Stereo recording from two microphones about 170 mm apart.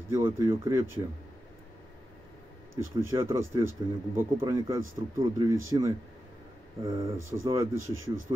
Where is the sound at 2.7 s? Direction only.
15° right (ahead or behind).